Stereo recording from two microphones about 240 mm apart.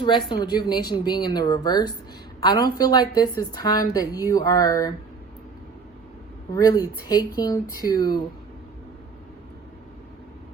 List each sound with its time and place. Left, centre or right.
0.0 s a woman's voice: centre
6.5 s a woman's voice: centre